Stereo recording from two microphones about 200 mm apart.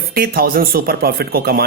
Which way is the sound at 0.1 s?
50° right (ahead or behind).